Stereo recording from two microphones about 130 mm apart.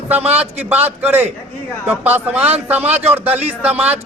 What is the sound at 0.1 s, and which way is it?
Speech, 10° right (ahead or behind).